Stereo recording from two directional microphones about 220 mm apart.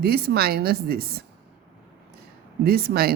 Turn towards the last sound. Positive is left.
turn(degrees=-45)  # may be behind; listen again after turning